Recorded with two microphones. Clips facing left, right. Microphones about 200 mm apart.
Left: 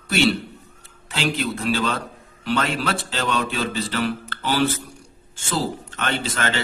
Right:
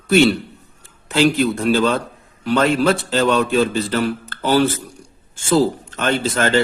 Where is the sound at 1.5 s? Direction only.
45° right (ahead or behind).